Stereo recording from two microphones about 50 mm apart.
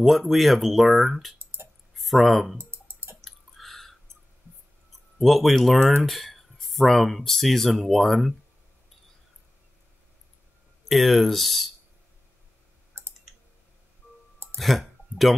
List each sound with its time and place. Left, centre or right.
0.0 s speech: centre
1.4 s a sound: right
2.0 s speech: centre
2.5 s a sound: right
3.2 s chewing: centre
5.2 s speech: centre
10.9 s speech: centre
14.6 s speech: centre